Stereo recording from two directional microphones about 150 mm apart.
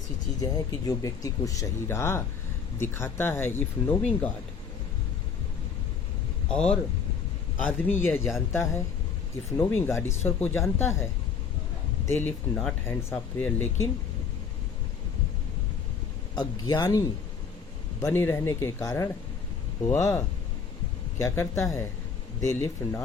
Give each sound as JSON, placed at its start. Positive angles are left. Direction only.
{"t": 0.3, "sound": "speech", "side_deg": 25}
{"t": 6.5, "sound": "speech", "side_deg": 5}
{"t": 7.9, "sound": "speech", "side_deg": 15}
{"t": 12.1, "sound": "speech", "side_deg": 15}
{"t": 16.3, "sound": "speech", "side_deg": 30}